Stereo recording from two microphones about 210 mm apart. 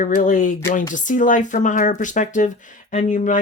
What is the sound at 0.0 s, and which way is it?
Speech, 40° left (ahead or behind).